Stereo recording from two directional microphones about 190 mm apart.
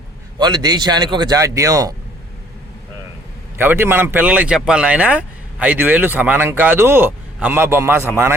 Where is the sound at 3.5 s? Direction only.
10° right (ahead or behind).